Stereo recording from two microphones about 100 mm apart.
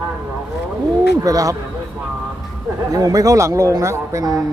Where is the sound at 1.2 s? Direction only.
35° right (ahead or behind).